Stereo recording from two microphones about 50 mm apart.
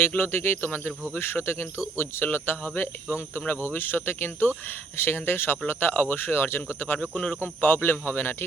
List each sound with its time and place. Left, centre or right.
0.2 s speech: left
7.0 s speech: left
7.4 s speech: left